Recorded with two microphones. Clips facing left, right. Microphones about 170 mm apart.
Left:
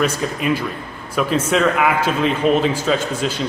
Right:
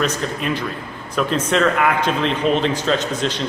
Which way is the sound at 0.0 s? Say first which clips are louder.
Left 2 dB; 10° left (ahead or behind).